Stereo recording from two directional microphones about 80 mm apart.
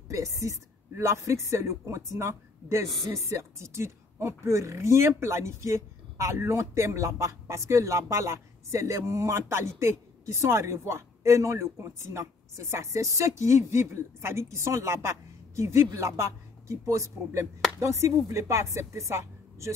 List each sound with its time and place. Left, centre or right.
0.1 s a woman's voice: right